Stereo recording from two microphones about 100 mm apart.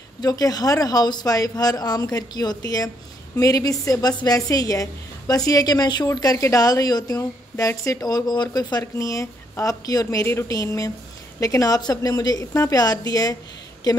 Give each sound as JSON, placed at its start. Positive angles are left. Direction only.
{"t": 0.2, "sound": "a woman's voice", "side_deg": 40}
{"t": 8.9, "sound": "a woman's voice", "side_deg": 30}